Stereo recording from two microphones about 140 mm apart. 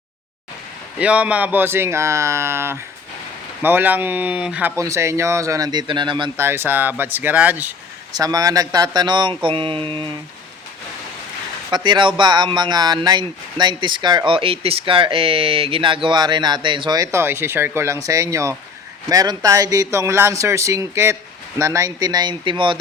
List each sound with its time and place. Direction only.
0.9 s speech: 10° right (ahead or behind)
4.8 s speech: 20° right (ahead or behind)
6.3 s speech: 15° right (ahead or behind)
8.1 s speech: 25° right (ahead or behind)
11.7 s speech: 35° right (ahead or behind)